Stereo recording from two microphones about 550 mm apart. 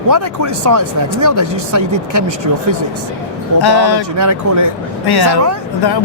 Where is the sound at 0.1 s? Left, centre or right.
Right.